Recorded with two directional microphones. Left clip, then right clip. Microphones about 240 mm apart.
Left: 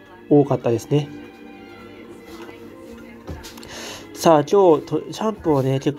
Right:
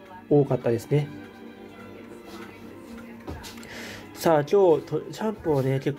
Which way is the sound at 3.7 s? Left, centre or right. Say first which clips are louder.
Left 7 dB; centre.